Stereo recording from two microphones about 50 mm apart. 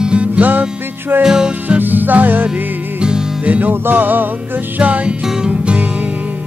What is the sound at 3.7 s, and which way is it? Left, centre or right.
Music, right.